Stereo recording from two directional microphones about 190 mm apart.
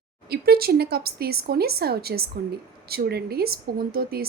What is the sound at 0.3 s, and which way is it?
A woman's voice, 55° right (ahead or behind).